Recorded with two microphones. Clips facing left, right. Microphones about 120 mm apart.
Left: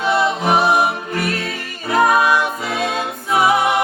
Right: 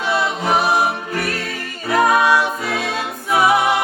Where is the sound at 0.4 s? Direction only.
25° left (ahead or behind).